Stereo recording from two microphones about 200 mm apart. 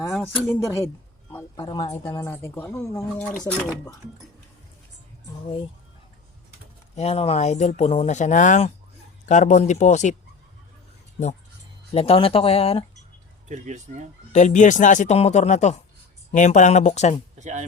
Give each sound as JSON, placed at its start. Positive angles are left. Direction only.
{"t": 0.1, "sound": "speech", "side_deg": 5}
{"t": 1.5, "sound": "speech", "side_deg": 20}
{"t": 6.9, "sound": "speech", "side_deg": 30}
{"t": 11.9, "sound": "speech", "side_deg": 30}
{"t": 13.5, "sound": "speech", "side_deg": -35}
{"t": 14.3, "sound": "speech", "side_deg": 35}
{"t": 17.3, "sound": "speech", "side_deg": -35}